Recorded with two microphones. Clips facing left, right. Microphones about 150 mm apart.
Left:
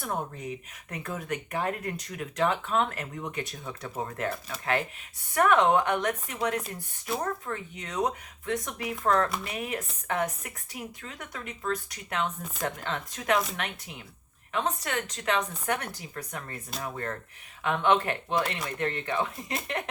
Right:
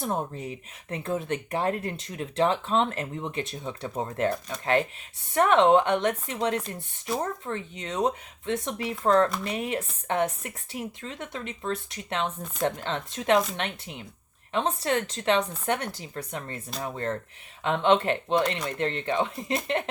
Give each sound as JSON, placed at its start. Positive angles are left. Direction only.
{"t": 0.0, "sound": "speech", "side_deg": -30}
{"t": 14.5, "sound": "speech", "side_deg": -30}